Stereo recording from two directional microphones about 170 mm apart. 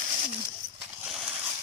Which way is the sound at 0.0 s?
50° right (ahead or behind).